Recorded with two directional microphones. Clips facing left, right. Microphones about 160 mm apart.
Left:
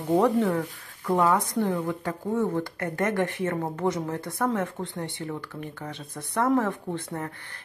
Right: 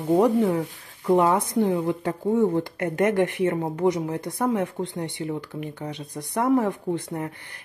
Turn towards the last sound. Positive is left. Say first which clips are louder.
# right 4 dB
turn(degrees=-15)  # may be behind; listen again after turning